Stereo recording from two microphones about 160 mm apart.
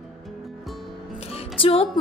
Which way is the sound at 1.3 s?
35° left (ahead or behind).